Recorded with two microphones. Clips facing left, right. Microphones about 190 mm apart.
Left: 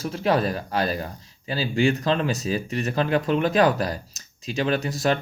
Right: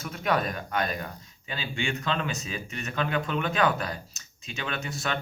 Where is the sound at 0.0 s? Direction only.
30° left (ahead or behind).